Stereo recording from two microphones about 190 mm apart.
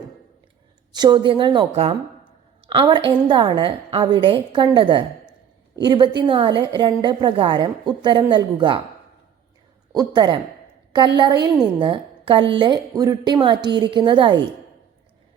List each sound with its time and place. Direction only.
0.9 s a woman's voice: 20° right (ahead or behind)
9.9 s a woman's voice: 20° right (ahead or behind)